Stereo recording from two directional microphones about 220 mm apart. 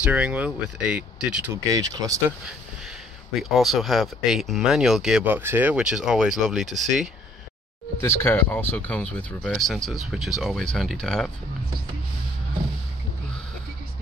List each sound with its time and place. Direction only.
0.0 s speech: 5° right (ahead or behind)
1.5 s speech: 15° right (ahead or behind)
3.4 s speech: centre (ahead or behind)
8.0 s speech: 10° left (ahead or behind)